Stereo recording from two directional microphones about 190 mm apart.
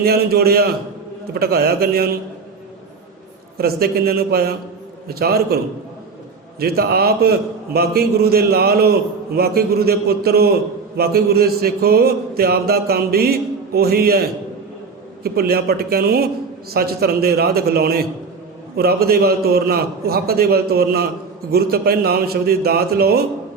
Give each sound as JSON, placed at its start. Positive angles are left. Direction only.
{"t": 0.0, "sound": "a man's voice", "side_deg": -55}
{"t": 3.6, "sound": "a man's voice", "side_deg": -55}
{"t": 6.6, "sound": "a man's voice", "side_deg": -55}